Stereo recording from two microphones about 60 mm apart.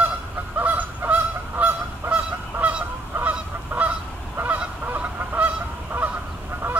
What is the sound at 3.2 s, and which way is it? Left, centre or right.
Goose, right.